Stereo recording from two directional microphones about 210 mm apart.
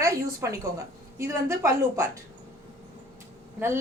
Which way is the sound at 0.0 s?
15° right (ahead or behind).